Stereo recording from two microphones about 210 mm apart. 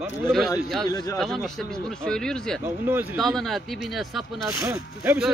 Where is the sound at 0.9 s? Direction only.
15° left (ahead or behind).